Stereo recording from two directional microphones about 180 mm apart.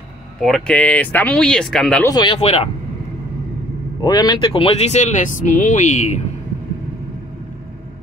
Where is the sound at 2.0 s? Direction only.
25° left (ahead or behind).